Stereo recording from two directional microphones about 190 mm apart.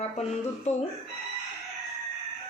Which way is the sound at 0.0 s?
35° left (ahead or behind).